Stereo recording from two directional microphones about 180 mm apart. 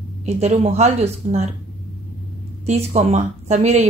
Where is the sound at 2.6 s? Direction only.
40° right (ahead or behind).